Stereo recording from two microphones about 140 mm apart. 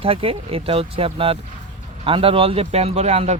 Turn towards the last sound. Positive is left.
turn(degrees=-50)  # may be behind; listen again after turning